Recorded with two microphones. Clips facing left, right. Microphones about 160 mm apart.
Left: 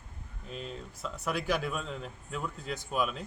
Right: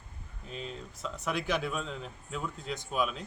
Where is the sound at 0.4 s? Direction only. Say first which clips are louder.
Even; centre (ahead or behind).